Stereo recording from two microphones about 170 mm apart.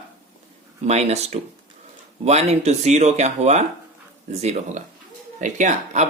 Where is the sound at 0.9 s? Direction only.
40° right (ahead or behind).